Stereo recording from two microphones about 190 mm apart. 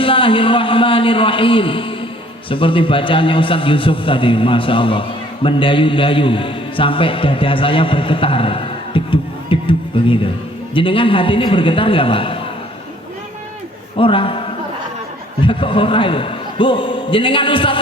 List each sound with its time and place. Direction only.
0.0 s a man's voice: 25° left (ahead or behind)
13.9 s a man's voice: 25° left (ahead or behind)